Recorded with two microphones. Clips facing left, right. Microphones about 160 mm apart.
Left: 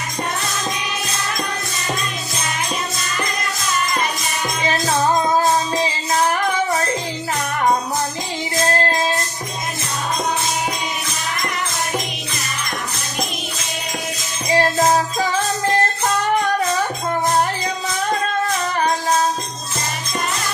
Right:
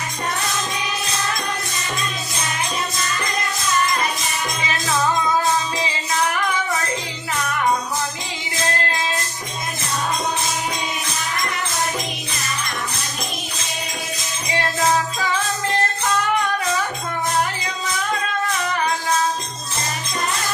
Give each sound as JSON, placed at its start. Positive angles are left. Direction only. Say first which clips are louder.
{"t": 5.7, "sound": "music", "louder": "left 4 dB", "side_deg": 40}
{"t": 8.8, "sound": "child singing", "louder": "left 5 dB", "side_deg": 40}
{"t": 14.5, "sound": "music", "louder": "left 4 dB", "side_deg": 35}